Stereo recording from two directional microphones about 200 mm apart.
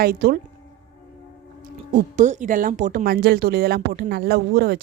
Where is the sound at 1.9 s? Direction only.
40° right (ahead or behind).